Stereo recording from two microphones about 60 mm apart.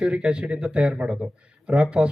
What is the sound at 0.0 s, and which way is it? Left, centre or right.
Speech, centre.